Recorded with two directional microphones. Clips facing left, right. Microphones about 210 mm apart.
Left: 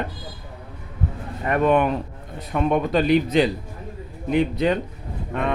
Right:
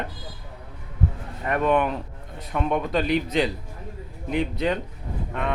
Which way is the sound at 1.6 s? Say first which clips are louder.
Left 3 dB; 40° left (ahead or behind).